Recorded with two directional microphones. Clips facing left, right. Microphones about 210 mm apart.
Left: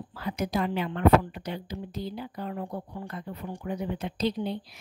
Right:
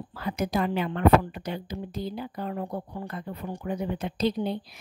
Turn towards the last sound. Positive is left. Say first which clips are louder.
# right 2 dB
turn(degrees=-50)  # may be behind; listen again after turning